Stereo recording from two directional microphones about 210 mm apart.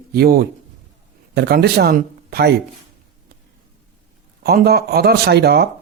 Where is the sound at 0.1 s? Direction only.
45° right (ahead or behind).